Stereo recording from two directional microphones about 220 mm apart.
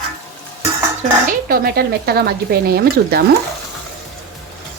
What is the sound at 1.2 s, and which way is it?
Speech, 40° right (ahead or behind).